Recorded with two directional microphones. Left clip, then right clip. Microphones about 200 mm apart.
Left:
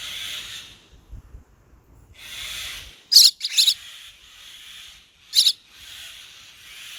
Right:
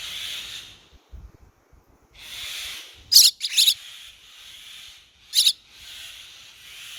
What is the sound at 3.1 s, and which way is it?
Chirp, 15° right (ahead or behind).